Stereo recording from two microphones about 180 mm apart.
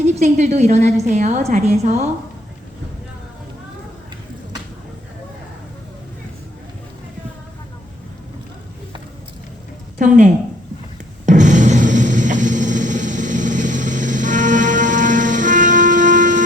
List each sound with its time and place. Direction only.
0.0 s a woman's voice: 40° right (ahead or behind)
10.0 s speech: 45° right (ahead or behind)
11.3 s a sound: 45° right (ahead or behind)